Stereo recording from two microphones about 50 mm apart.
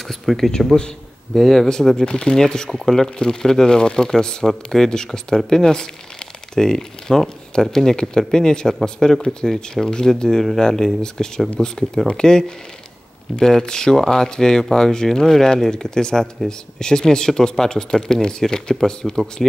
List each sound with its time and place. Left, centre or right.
0.0 s speech: centre